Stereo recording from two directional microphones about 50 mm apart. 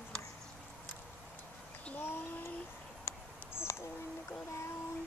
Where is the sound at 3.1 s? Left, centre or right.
Left.